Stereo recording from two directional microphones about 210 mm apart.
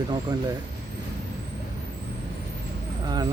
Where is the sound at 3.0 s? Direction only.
20° right (ahead or behind).